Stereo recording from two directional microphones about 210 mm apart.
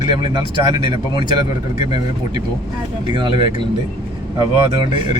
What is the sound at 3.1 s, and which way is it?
Speech, 25° right (ahead or behind).